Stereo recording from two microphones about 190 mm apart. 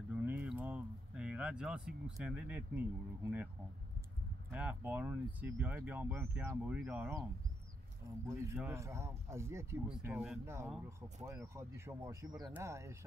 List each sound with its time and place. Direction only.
0.1 s a sound: 10° right (ahead or behind)
4.5 s speech: 5° right (ahead or behind)
8.3 s speech: 15° right (ahead or behind)